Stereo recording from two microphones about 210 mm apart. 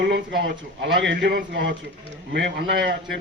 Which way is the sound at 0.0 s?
50° right (ahead or behind).